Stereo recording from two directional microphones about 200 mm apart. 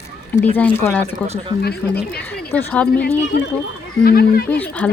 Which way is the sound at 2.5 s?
10° left (ahead or behind).